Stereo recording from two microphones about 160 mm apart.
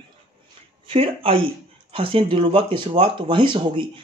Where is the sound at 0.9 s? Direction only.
35° right (ahead or behind).